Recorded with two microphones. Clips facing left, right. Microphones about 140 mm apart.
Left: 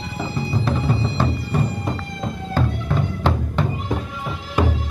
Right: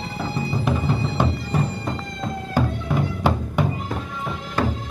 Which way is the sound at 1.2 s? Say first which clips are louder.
Right 1 dB; 15° right (ahead or behind).